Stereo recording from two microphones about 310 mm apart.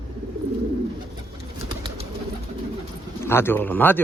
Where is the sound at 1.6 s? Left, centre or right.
Centre.